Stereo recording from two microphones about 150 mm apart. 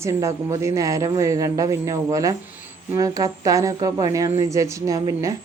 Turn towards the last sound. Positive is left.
turn(degrees=-25)  # may be behind; listen again after turning